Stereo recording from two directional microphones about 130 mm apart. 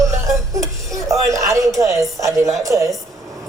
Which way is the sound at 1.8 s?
25° right (ahead or behind).